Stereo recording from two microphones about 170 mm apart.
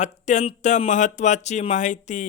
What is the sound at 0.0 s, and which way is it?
Speech, 45° left (ahead or behind).